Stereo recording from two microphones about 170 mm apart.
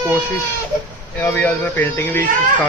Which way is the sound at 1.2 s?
10° left (ahead or behind).